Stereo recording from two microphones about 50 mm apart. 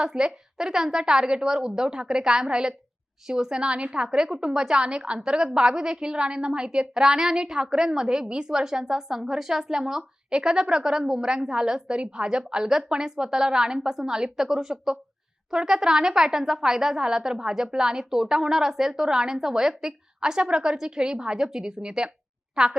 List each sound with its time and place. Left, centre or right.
0.0 s a woman's voice: centre